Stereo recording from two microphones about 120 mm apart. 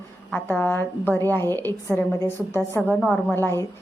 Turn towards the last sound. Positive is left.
turn(degrees=20)  # may be behind; listen again after turning